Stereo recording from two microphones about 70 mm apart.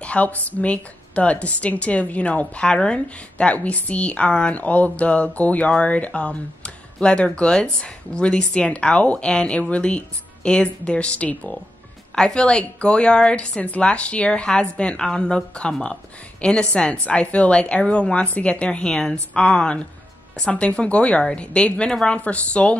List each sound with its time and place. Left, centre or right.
0.0 s a woman's voice: centre